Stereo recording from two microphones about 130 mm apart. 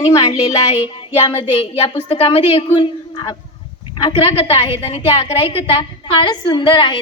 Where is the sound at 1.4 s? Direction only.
50° left (ahead or behind).